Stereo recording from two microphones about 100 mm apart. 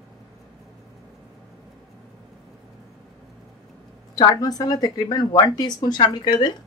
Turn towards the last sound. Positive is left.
turn(degrees=50)  # may be behind; listen again after turning